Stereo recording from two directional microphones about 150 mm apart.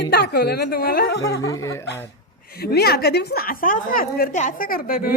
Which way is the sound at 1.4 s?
20° left (ahead or behind).